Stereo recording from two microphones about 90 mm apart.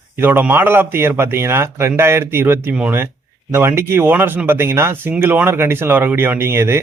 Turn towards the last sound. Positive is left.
turn(degrees=-25)  # may be behind; listen again after turning